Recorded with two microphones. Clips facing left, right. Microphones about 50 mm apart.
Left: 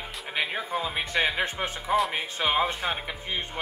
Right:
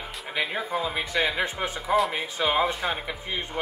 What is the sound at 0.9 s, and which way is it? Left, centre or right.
Speech, left.